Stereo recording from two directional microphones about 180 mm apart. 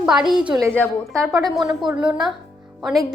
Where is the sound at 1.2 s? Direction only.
15° right (ahead or behind).